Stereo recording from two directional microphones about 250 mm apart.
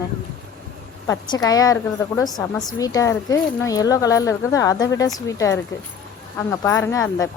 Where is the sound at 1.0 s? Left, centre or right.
Centre.